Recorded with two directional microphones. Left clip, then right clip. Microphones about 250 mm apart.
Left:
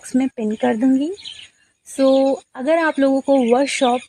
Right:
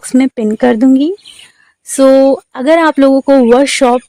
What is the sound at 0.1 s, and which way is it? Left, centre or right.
Speech, right.